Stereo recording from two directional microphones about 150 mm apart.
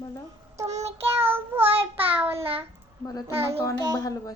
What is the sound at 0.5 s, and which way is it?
Child singing, 20° right (ahead or behind).